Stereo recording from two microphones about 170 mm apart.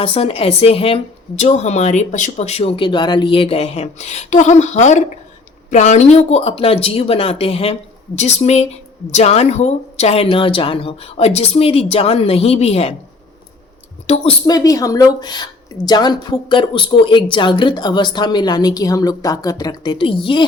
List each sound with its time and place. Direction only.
0.0 s speech: 35° left (ahead or behind)
14.1 s speech: 40° left (ahead or behind)
14.4 s a woman's voice: 20° left (ahead or behind)